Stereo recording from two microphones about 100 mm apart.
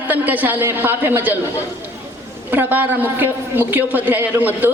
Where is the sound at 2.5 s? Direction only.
20° right (ahead or behind).